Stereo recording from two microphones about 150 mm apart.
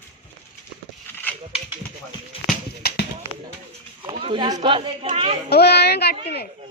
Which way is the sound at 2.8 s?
90° left.